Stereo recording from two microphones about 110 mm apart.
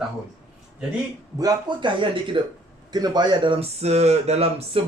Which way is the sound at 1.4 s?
40° right (ahead or behind).